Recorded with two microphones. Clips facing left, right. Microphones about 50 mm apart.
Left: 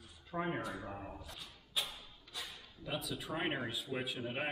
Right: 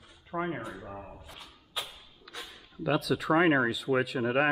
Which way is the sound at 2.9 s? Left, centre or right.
Right.